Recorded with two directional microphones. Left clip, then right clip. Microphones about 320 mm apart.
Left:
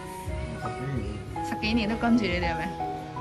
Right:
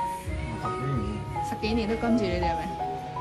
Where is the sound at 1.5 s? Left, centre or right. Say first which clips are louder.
Left 1 dB; centre.